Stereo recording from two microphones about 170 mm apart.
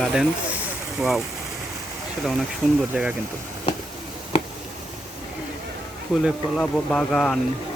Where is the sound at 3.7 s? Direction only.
30° left (ahead or behind).